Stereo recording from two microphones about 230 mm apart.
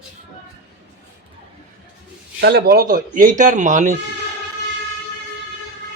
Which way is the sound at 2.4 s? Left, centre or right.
Right.